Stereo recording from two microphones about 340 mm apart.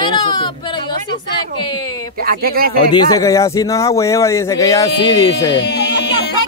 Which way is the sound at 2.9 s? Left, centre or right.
Centre.